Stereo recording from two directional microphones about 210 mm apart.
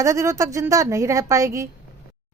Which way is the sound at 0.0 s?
15° right (ahead or behind).